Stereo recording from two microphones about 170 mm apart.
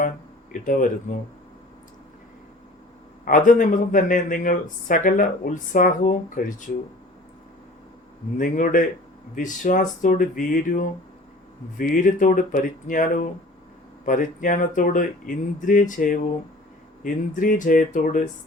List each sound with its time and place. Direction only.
0.5 s speech: 50° left (ahead or behind)
3.2 s speech: 50° left (ahead or behind)
8.4 s speech: 50° left (ahead or behind)